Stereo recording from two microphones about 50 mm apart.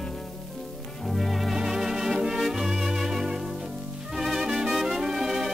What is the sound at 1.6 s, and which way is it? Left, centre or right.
Music, centre.